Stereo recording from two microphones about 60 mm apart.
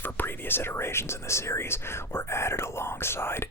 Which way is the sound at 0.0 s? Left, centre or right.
Left.